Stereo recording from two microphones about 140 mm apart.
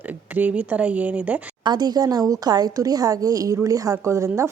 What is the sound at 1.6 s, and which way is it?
A woman's voice, 30° right (ahead or behind).